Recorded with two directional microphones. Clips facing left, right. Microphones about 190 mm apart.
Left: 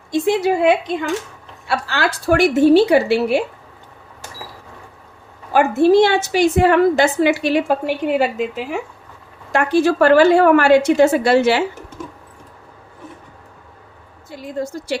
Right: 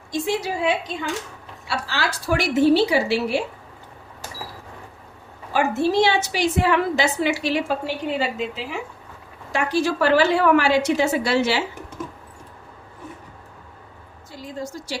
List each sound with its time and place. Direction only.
0.1 s a woman's voice: 55° left (ahead or behind)
5.5 s a woman's voice: 55° left (ahead or behind)
14.3 s a woman's voice: 55° left (ahead or behind)